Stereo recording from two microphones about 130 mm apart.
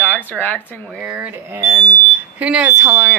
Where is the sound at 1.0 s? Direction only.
10° right (ahead or behind).